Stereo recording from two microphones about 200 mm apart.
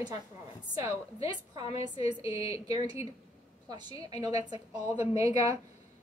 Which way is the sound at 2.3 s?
30° left (ahead or behind).